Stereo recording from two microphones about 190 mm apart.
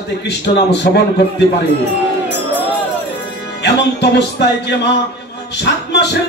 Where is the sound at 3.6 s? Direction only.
65° left (ahead or behind).